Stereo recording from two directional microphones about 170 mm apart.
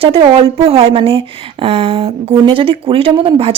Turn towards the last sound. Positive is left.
turn(degrees=-30)  # may be behind; listen again after turning